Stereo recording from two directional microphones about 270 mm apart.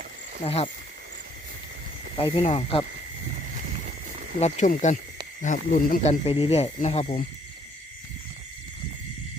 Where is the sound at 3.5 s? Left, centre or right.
Right.